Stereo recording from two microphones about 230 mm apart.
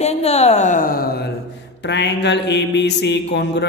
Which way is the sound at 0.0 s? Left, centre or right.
Left.